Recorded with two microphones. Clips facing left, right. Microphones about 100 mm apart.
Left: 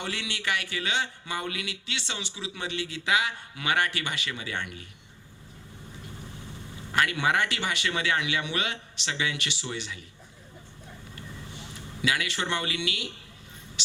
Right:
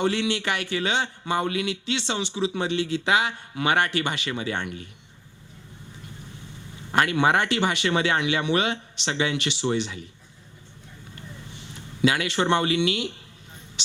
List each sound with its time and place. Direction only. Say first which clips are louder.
0.0 s a man's voice: right 10 dB; 25° right (ahead or behind)
6.9 s a man's voice: right 5 dB; 25° right (ahead or behind)
11.1 s a sound: right 2 dB; 25° right (ahead or behind)